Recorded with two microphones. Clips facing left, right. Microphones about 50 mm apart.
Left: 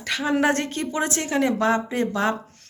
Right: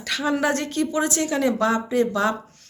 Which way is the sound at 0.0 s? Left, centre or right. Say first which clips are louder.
Left 1 dB; left.